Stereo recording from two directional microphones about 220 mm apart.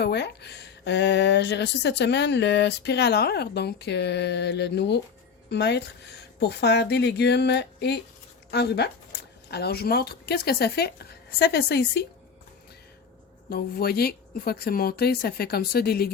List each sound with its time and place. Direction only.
0.0 s speech: 50° left (ahead or behind)
13.5 s speech: 45° left (ahead or behind)